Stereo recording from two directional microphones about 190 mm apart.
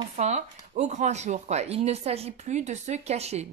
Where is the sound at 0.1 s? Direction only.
35° right (ahead or behind).